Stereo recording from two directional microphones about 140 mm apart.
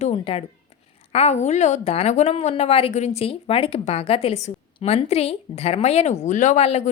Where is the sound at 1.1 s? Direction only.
50° left (ahead or behind).